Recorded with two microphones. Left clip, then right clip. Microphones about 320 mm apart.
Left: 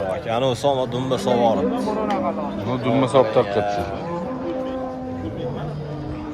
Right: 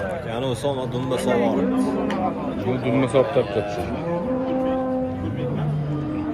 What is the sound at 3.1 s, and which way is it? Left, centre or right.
Speech, left.